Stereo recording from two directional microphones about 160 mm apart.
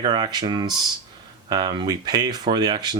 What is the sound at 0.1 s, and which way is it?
Speech, 25° right (ahead or behind).